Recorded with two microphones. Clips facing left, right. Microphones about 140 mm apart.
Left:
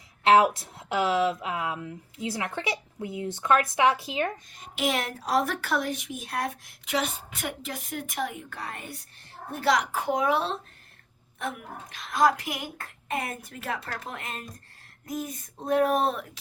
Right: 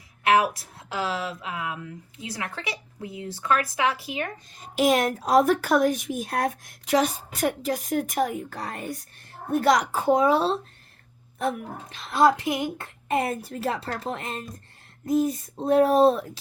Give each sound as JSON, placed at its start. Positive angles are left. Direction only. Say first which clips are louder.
{"t": 0.3, "sound": "speech", "louder": "left 2 dB", "side_deg": 25}
{"t": 4.6, "sound": "speech", "louder": "right 7 dB", "side_deg": -40}
{"t": 9.9, "sound": "a child's voice", "louder": "right 5 dB", "side_deg": -30}